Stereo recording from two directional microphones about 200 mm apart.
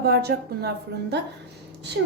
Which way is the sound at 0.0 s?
55° right (ahead or behind).